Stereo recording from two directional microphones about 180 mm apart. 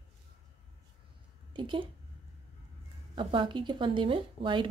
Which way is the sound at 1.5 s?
25° right (ahead or behind).